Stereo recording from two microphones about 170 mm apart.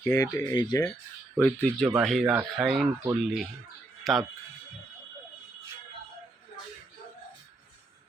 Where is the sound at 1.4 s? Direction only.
5° left (ahead or behind).